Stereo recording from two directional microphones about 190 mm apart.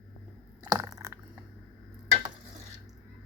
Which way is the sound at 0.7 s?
20° right (ahead or behind).